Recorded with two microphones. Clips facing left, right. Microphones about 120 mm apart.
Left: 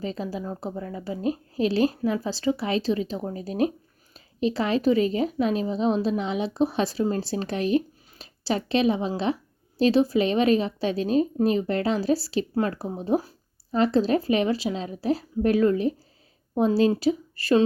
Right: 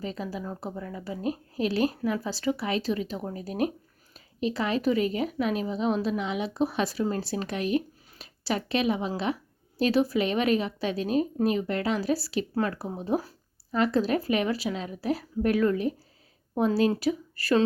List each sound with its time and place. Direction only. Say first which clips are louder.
0.0 s speech: left 3 dB; 30° left (ahead or behind)